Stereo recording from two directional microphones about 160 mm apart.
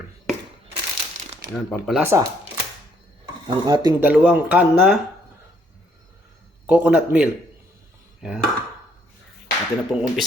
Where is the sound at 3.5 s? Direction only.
25° right (ahead or behind).